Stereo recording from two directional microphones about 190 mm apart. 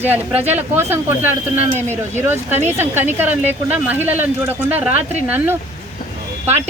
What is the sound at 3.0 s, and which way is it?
Speech, 10° right (ahead or behind).